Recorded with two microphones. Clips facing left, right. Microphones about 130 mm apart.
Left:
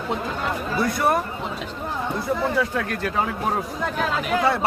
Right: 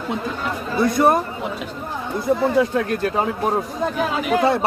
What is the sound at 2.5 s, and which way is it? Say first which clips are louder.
Speech: right 5 dB; 25° right (ahead or behind).